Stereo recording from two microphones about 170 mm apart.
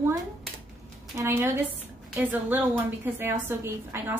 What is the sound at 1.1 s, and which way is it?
A woman's voice, 15° right (ahead or behind).